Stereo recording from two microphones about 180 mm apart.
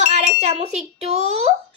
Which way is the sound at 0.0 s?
40° right (ahead or behind).